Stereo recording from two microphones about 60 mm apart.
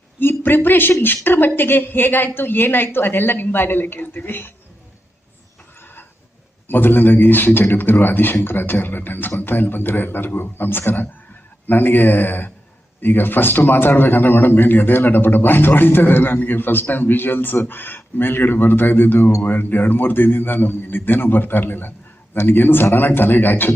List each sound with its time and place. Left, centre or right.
0.2 s a man's voice: left
5.8 s neigh: left
6.7 s a man's voice: left